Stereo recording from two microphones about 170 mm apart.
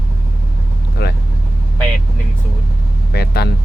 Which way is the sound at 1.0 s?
75° left (ahead or behind).